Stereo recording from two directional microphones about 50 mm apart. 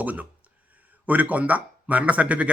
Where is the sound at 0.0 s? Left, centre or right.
Right.